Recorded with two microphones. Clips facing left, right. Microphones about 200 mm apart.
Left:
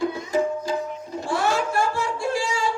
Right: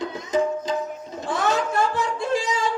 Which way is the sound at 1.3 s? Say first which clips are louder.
Even; 20° right (ahead or behind).